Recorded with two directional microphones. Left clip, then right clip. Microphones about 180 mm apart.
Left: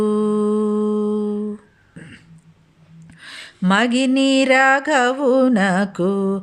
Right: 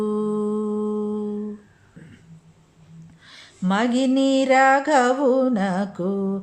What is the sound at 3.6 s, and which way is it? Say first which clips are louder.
Music: left 4 dB; 25° left (ahead or behind).